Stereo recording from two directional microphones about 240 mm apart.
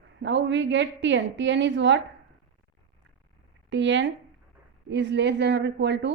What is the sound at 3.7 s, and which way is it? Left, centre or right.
A woman's voice, right.